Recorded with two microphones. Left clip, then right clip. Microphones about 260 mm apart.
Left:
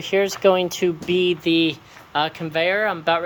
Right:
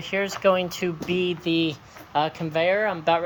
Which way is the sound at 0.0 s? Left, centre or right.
Centre.